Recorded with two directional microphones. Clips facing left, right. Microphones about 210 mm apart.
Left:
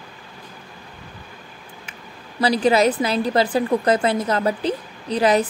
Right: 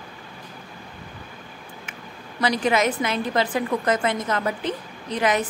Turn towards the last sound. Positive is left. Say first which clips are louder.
# left 5 dB
turn(degrees=35)  # may be behind; listen again after turning